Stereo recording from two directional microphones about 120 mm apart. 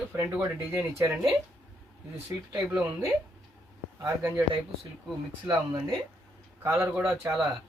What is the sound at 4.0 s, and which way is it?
Speech, 25° right (ahead or behind).